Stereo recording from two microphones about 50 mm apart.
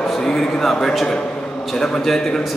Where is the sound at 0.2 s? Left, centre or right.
Centre.